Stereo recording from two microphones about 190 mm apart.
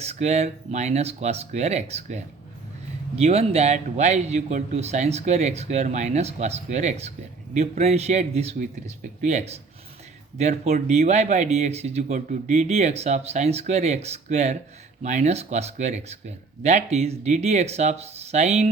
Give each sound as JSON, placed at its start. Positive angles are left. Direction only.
{"t": 0.0, "sound": "speech", "side_deg": -35}